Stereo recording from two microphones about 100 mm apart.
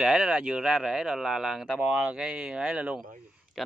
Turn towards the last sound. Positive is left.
turn(degrees=0)  # may be behind; listen again after turning